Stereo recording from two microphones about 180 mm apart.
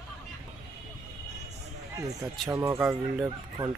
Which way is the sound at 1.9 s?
20° right (ahead or behind).